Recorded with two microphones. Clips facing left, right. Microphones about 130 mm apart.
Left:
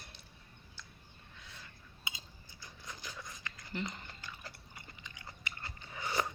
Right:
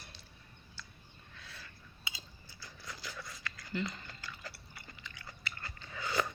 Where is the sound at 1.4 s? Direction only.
20° left (ahead or behind).